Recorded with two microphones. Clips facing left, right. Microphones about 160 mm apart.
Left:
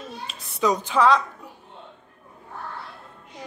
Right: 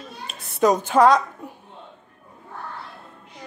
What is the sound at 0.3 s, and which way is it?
Speech, 50° right (ahead or behind).